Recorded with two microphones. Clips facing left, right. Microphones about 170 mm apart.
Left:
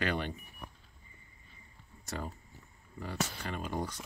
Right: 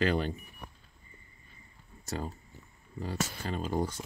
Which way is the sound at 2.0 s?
25° right (ahead or behind).